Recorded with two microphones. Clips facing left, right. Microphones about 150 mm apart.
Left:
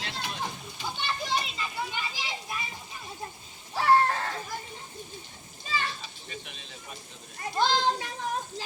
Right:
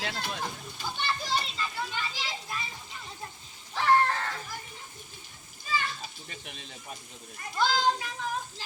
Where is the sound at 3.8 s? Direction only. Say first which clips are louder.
Left 1 dB; 20° left (ahead or behind).